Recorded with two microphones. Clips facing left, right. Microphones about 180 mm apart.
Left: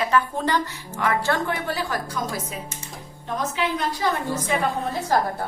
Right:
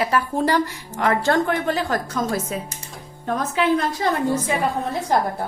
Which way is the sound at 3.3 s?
60° right (ahead or behind).